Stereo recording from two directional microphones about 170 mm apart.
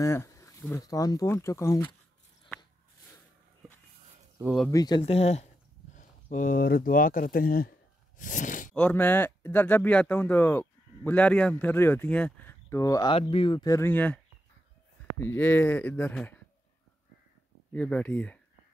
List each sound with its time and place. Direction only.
0.0 s speech: 15° left (ahead or behind)
4.4 s speech: 5° right (ahead or behind)
4.6 s speech: 20° left (ahead or behind)
5.0 s speech: 35° left (ahead or behind)
6.3 s speech: 50° left (ahead or behind)
8.2 s gasp: 50° left (ahead or behind)
8.7 s speech: 10° left (ahead or behind)
13.1 s speech: 30° left (ahead or behind); by 16.3 s 10° left (ahead or behind)
17.7 s speech: 10° left (ahead or behind)